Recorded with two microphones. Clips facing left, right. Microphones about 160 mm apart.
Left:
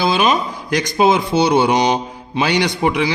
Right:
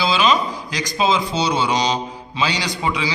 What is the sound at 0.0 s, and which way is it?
A man's voice, 55° left (ahead or behind).